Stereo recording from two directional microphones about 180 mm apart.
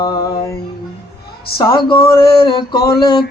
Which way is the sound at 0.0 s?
20° left (ahead or behind).